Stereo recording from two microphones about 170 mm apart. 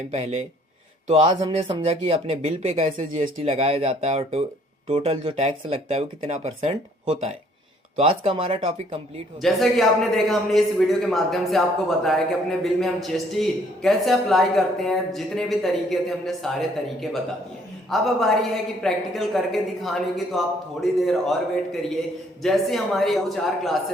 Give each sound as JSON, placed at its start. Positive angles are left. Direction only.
{"t": 0.1, "sound": "speech", "side_deg": -40}
{"t": 1.4, "sound": "speech", "side_deg": -25}
{"t": 1.8, "sound": "speech", "side_deg": -35}
{"t": 9.4, "sound": "a man's voice", "side_deg": 0}